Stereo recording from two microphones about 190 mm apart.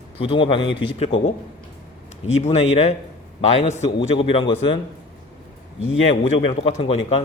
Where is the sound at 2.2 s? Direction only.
35° left (ahead or behind).